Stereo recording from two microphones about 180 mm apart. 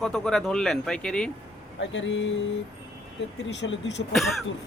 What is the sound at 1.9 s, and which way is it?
Speech, 90° left.